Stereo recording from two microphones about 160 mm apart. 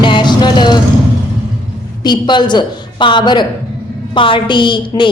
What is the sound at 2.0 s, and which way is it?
A woman's voice, 30° left (ahead or behind).